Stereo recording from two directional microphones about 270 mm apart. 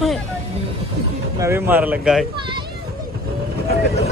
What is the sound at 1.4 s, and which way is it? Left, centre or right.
Speech, centre.